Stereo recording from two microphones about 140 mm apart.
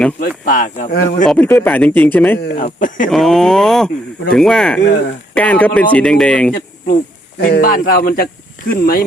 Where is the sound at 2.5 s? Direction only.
65° left (ahead or behind).